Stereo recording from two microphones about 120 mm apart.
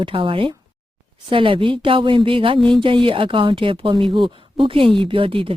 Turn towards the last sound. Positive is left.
turn(degrees=-45)  # may be behind; listen again after turning